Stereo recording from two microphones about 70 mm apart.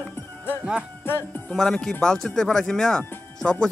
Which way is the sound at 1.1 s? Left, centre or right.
Left.